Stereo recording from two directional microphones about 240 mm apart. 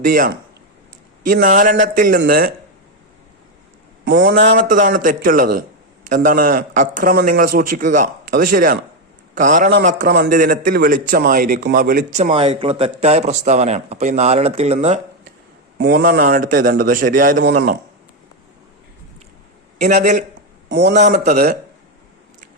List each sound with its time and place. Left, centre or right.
0.0 s a man's voice: right
4.0 s a man's voice: right
15.8 s a man's voice: right
19.8 s a man's voice: right
20.7 s a man's voice: right
21.1 s a man's voice: right